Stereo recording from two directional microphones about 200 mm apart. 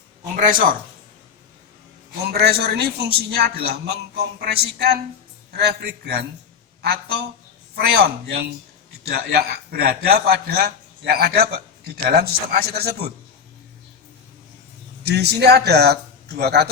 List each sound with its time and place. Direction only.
0.3 s a man's voice: 40° right (ahead or behind)
2.3 s a man's voice: 50° right (ahead or behind)
15.0 s a man's voice: 55° right (ahead or behind)